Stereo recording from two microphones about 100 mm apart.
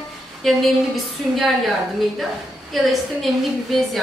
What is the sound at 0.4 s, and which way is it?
A woman's voice, centre (ahead or behind).